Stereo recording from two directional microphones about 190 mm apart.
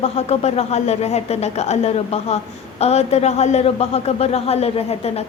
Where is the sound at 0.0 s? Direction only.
35° left (ahead or behind).